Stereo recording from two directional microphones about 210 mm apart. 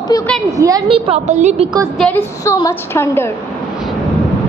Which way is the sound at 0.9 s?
30° right (ahead or behind).